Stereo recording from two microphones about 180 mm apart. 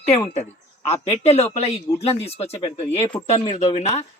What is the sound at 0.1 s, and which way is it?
Speech, 35° left (ahead or behind).